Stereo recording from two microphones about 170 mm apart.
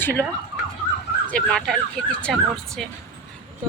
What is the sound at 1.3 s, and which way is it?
Speech, 5° left (ahead or behind).